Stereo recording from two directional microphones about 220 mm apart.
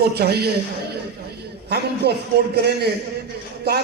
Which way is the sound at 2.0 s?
50° right (ahead or behind).